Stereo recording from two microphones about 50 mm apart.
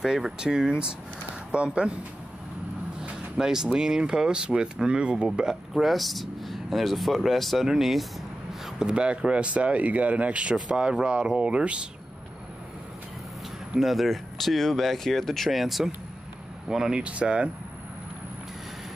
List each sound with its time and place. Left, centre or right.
0.0 s speech: centre
3.0 s speech: centre
5.5 s speech: centre
8.7 s speech: centre
13.7 s speech: centre
16.6 s speech: centre
17.0 s speech: right